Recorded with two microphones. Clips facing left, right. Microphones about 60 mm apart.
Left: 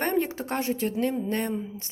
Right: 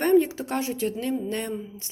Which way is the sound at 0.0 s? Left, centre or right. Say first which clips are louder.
Right 6 dB; left.